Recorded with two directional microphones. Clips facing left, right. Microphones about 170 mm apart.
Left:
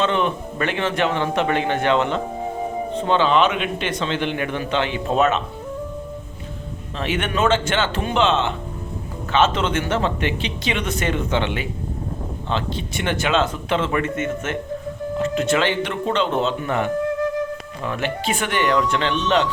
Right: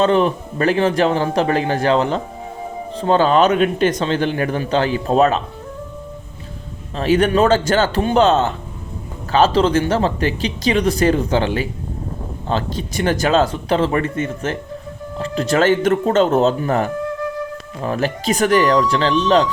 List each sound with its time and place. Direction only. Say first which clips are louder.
0.0 s a man's voice: right 6 dB; 35° right (ahead or behind)
6.9 s a man's voice: right 9 dB; 35° right (ahead or behind)